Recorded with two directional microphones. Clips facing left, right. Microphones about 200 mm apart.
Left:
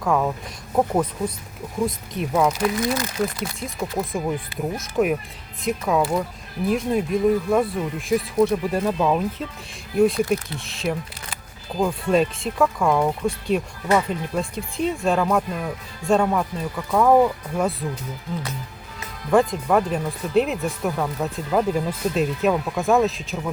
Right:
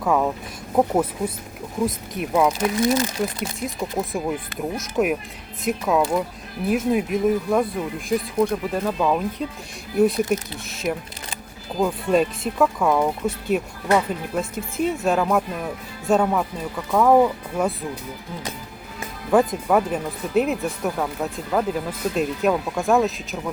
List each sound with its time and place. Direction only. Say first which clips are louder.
0.0 s speech: right 1 dB; 5° right (ahead or behind)
1.8 s speech: even; centre (ahead or behind)
2.6 s speech: right 2 dB; 25° right (ahead or behind)
3.6 s speech: right 1 dB; centre (ahead or behind)
19.3 s speech: even; 5° right (ahead or behind)